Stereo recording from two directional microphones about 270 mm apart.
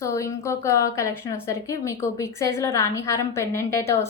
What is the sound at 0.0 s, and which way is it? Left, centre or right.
A woman's voice, centre.